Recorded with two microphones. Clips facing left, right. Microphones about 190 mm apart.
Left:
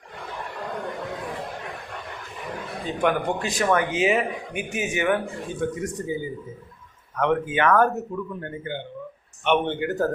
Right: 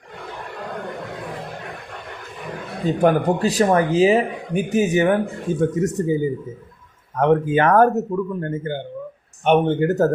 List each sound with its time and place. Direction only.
2.8 s speech: 40° right (ahead or behind)
7.2 s speech: 40° right (ahead or behind)